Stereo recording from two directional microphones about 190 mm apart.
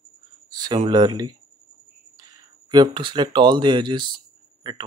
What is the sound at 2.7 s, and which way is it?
Speech, 25° right (ahead or behind).